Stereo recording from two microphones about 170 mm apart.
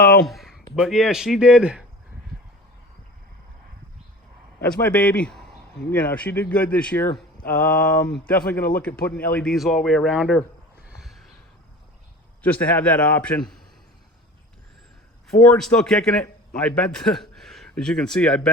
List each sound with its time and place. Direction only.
0.3 s a sound: centre (ahead or behind)
0.8 s a man's voice: centre (ahead or behind)
4.6 s a man's voice: 10° left (ahead or behind)
10.8 s a sound: centre (ahead or behind)
12.4 s speech: 10° left (ahead or behind)
15.3 s a man's voice: 5° left (ahead or behind)